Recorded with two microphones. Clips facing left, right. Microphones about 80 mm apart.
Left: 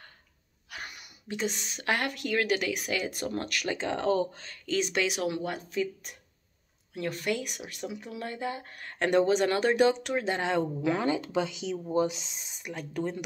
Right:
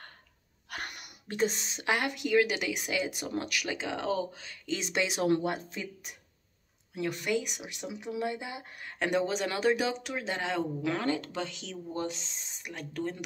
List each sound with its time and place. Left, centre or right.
0.7 s sneeze: right
1.2 s speech: right
1.9 s speech: centre
4.8 s speech: right
6.9 s speech: centre
8.9 s speech: centre
11.0 s speech: centre